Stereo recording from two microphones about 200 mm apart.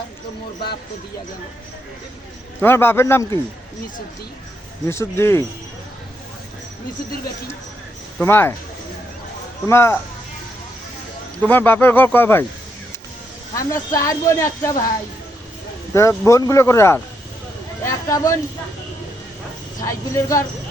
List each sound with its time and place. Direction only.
2.6 s speech: 10° left (ahead or behind)
4.9 s speech: 15° left (ahead or behind)
8.2 s speech: 10° left (ahead or behind)
9.6 s speech: 10° left (ahead or behind)
11.4 s speech: 10° left (ahead or behind)
13.5 s speech: 15° left (ahead or behind)
16.0 s speech: 15° left (ahead or behind)
19.8 s speech: 15° left (ahead or behind)